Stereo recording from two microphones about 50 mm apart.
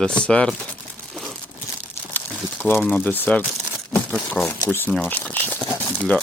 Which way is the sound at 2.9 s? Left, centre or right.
Left.